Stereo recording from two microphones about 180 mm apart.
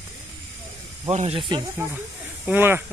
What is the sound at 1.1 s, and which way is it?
Speech, 35° right (ahead or behind).